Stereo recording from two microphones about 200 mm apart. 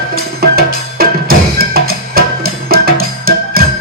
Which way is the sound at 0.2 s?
50° right (ahead or behind).